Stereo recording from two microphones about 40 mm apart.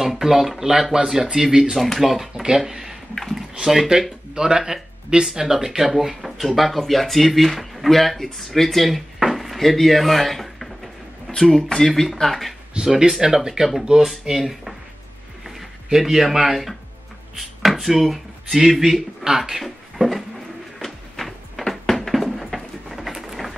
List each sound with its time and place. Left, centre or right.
0.0 s speech: centre
1.8 s speech: centre
4.4 s speech: centre
9.2 s drawer open or close: centre
11.3 s speech: centre
12.7 s speech: right
13.2 s speech: centre
13.9 s speech: right
14.4 s speech: centre
19.6 s speech: centre
20.8 s a sound: centre